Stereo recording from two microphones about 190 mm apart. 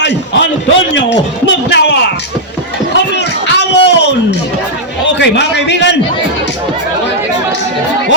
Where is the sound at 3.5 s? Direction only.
65° left (ahead or behind).